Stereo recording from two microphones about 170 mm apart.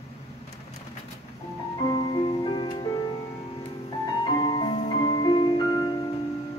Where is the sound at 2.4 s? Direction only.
30° left (ahead or behind).